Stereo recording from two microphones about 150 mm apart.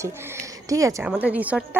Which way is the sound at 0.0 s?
20° right (ahead or behind).